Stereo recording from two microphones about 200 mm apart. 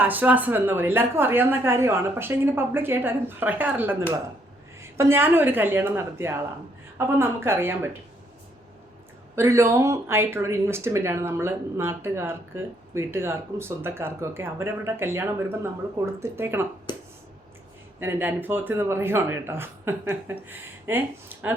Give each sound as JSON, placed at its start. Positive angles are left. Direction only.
{"t": 0.0, "sound": "speech", "side_deg": -10}
{"t": 9.3, "sound": "speech", "side_deg": -15}
{"t": 16.9, "sound": "a sound", "side_deg": 20}
{"t": 18.0, "sound": "speech", "side_deg": -10}